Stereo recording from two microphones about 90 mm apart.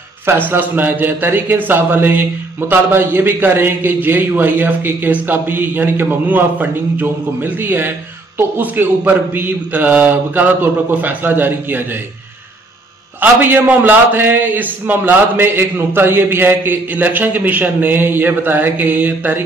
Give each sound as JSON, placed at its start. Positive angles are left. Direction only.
{"t": 0.3, "sound": "a man's voice", "side_deg": -25}
{"t": 13.2, "sound": "a man's voice", "side_deg": -20}